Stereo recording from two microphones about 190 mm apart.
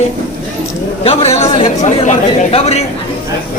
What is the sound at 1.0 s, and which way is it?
Speech, 35° left (ahead or behind).